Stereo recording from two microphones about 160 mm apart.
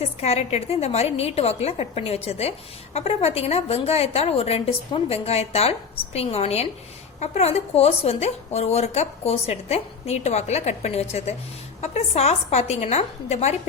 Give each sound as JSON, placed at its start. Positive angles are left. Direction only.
{"t": 0.0, "sound": "speech", "side_deg": 40}